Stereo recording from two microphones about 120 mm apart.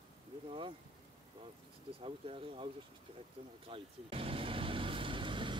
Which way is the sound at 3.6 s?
50° right (ahead or behind).